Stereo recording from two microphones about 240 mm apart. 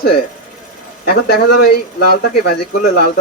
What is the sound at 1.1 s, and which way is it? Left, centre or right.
Speech, left.